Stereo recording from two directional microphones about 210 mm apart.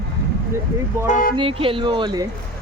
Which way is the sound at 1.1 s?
40° left (ahead or behind).